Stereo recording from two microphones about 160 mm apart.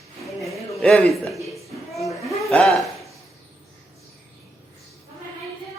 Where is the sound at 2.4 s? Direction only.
Centre (ahead or behind).